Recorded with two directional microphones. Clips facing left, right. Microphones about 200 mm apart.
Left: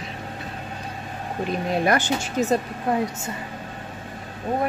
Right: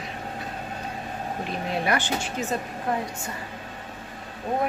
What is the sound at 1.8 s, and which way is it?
Speech, 45° left (ahead or behind).